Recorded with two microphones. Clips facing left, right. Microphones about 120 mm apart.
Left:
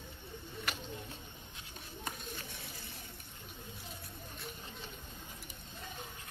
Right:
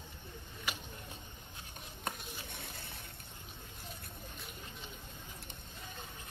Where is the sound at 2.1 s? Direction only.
60° right (ahead or behind).